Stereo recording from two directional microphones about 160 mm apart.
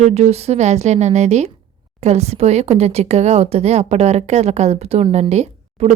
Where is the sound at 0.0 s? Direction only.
40° right (ahead or behind).